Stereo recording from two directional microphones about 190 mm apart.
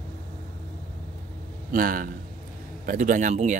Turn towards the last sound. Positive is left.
turn(degrees=-40)  # may be behind; listen again after turning